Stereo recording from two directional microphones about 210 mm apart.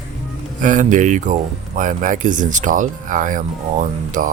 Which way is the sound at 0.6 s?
35° right (ahead or behind).